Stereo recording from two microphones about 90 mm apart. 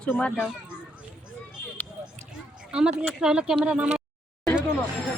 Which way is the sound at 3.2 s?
10° right (ahead or behind).